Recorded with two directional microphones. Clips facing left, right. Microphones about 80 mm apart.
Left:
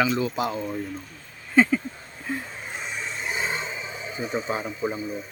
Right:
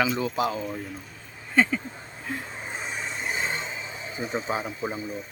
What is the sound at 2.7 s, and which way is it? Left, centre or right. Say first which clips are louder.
Vehicle: even; centre.